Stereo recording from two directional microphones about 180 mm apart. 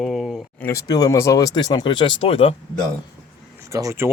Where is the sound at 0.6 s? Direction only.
20° left (ahead or behind).